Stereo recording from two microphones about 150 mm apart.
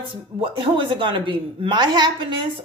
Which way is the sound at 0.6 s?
30° right (ahead or behind).